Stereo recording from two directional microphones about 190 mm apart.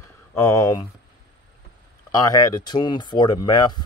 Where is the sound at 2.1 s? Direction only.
20° left (ahead or behind).